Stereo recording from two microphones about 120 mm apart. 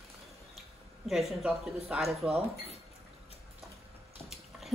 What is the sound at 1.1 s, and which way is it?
Speech, centre (ahead or behind).